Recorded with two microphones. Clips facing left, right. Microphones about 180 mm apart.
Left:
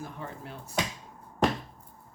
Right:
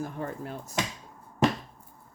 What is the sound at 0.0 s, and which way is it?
Speech, 45° right (ahead or behind).